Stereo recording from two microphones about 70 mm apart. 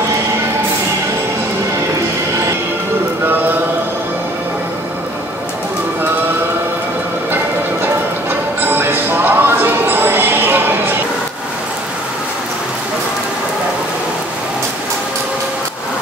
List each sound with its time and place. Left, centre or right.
7.8 s music: right